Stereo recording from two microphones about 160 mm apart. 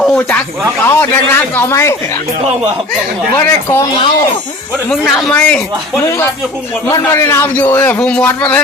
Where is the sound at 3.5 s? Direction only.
15° left (ahead or behind).